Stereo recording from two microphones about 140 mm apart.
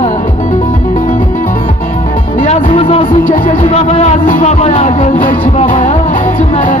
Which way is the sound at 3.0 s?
90° left.